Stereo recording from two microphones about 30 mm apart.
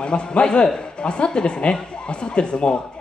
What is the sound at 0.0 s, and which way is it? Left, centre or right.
A man's voice, left.